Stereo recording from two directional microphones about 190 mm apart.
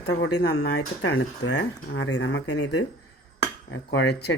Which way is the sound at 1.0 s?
80° left.